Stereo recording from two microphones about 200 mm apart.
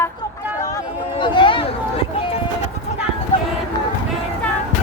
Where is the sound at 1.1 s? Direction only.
25° left (ahead or behind).